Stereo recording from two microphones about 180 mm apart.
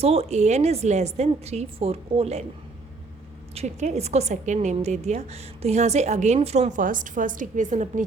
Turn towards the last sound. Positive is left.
turn(degrees=-45)  # may be behind; listen again after turning